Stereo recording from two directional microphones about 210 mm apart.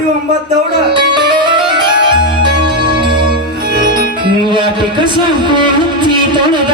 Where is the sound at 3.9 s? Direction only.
25° right (ahead or behind).